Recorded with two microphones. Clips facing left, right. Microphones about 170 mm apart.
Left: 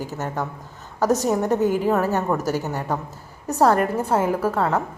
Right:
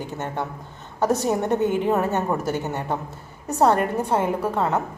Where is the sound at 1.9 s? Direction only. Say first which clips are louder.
Left 1 dB; 25° right (ahead or behind).